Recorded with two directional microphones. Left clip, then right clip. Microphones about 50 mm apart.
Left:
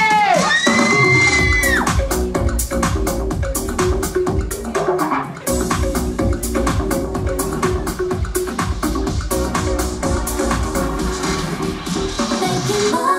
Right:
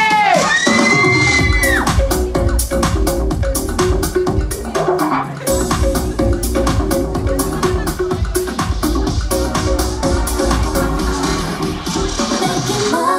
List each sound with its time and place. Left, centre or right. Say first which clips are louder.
0.0 s music: right 2 dB; centre
1.9 s music: right 2 dB; centre
6.5 s music: even; centre
9.3 s music: right 2 dB; centre
12.2 s music: right 1 dB; centre